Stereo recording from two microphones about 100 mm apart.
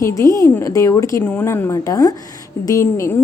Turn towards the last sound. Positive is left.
turn(degrees=30)  # may be behind; listen again after turning